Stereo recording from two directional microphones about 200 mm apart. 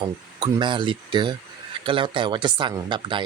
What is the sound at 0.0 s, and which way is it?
Speech, 20° right (ahead or behind).